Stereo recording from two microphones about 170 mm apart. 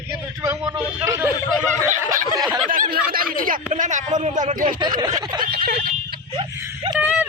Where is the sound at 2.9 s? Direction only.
60° right (ahead or behind).